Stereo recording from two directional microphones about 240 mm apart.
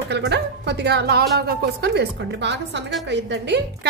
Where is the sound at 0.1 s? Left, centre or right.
Right.